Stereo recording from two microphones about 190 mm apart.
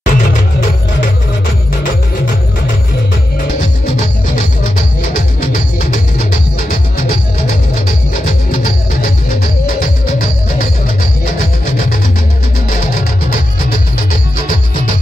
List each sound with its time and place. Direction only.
0.0 s music: 45° left (ahead or behind)
5.1 s music: 40° left (ahead or behind)
9.8 s music: 50° left (ahead or behind)